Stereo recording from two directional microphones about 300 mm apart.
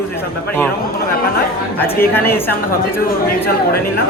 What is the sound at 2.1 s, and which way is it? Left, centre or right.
Speech, centre.